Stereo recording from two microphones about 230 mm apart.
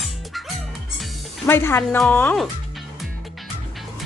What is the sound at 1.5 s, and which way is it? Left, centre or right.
A woman's voice, centre.